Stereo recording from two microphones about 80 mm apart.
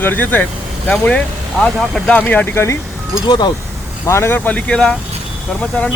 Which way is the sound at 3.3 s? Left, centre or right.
Left.